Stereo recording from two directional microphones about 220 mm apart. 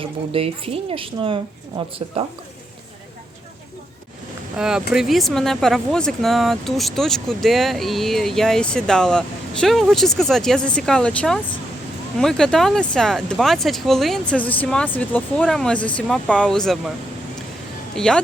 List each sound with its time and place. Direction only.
0.0 s speech: 25° right (ahead or behind)
4.5 s speech: 5° right (ahead or behind)
17.9 s speech: 5° left (ahead or behind)